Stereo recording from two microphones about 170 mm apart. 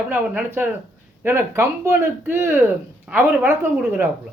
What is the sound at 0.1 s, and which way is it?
Speech, 10° right (ahead or behind).